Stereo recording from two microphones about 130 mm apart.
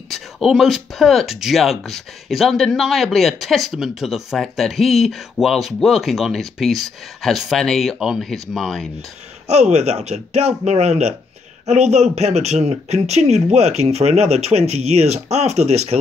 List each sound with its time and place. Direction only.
0.1 s speech: centre (ahead or behind)
9.5 s speech: 60° right (ahead or behind)